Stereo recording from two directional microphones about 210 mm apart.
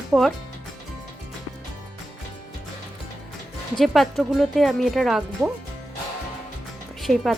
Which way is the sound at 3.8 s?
Centre (ahead or behind).